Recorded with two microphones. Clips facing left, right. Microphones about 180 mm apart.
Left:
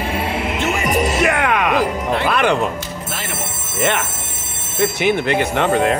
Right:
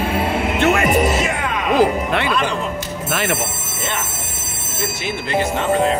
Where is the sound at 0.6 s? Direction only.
60° right (ahead or behind).